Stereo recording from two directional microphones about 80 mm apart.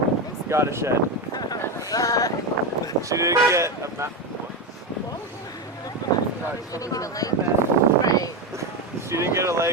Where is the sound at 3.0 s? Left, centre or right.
Right.